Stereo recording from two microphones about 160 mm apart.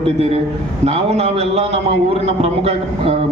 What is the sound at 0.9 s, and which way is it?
A man's voice, 40° right (ahead or behind).